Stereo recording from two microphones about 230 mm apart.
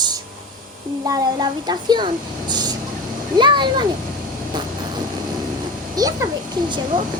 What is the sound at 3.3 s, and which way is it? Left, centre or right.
Speech, centre.